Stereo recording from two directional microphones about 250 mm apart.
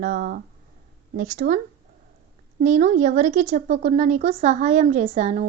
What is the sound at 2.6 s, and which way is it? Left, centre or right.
A woman's voice, right.